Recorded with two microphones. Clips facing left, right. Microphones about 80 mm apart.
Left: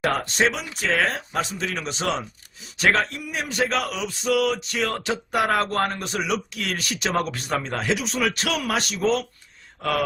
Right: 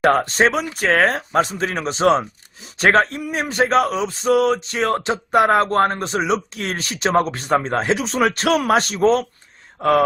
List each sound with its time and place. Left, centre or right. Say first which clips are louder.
0.0 s speech: right 6 dB; right